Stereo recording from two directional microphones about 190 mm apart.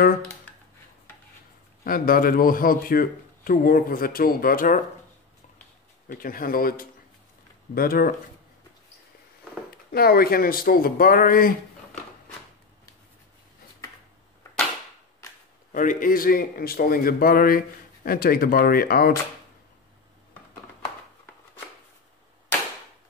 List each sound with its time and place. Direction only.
0.5 s dishes: 10° left (ahead or behind)
1.9 s a man's voice: 50° left (ahead or behind)
6.0 s a man's voice: 50° left (ahead or behind)
9.7 s a man's voice: 55° left (ahead or behind)
15.7 s a man's voice: 45° left (ahead or behind)